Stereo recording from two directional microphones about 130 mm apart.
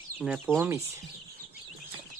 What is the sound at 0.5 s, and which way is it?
Speech, 20° right (ahead or behind).